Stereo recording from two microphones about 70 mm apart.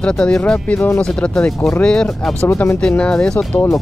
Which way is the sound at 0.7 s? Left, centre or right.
Left.